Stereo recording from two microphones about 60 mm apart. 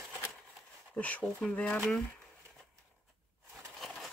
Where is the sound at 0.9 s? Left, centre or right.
Left.